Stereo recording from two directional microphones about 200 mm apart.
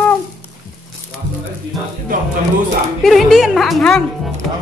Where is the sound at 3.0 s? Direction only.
Centre (ahead or behind).